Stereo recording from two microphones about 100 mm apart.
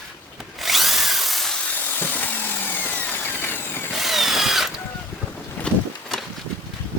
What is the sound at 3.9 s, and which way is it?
Drill, centre (ahead or behind).